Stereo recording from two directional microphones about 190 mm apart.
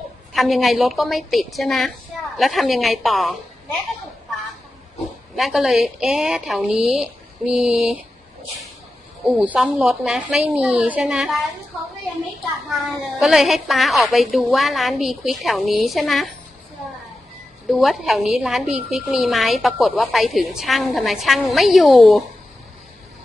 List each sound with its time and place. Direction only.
0.3 s a woman's voice: centre (ahead or behind)
5.3 s a woman's voice: centre (ahead or behind)
9.4 s a woman's voice: 5° right (ahead or behind)
12.6 s a woman's voice: centre (ahead or behind)
17.6 s a woman's voice: centre (ahead or behind)